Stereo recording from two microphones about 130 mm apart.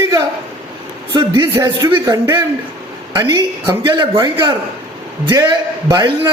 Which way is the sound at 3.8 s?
35° right (ahead or behind).